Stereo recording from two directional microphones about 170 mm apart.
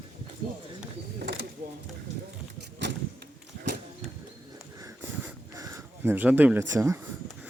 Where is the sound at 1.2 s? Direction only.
75° right (ahead or behind).